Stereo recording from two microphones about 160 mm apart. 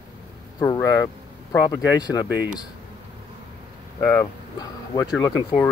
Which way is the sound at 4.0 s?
20° left (ahead or behind).